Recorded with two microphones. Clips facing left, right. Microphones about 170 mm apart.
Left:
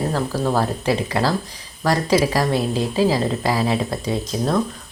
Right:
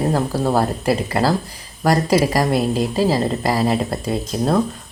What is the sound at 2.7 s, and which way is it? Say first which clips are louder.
Speech: right 1 dB; 40° right (ahead or behind).